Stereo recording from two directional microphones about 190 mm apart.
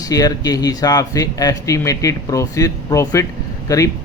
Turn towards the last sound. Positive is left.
turn(degrees=15)  # may be behind; listen again after turning